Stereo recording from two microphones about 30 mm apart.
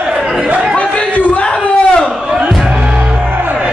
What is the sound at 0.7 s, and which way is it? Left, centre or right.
Chatter, left.